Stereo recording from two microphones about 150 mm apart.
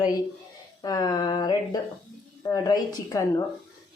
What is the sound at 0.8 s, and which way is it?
Speech, 25° left (ahead or behind).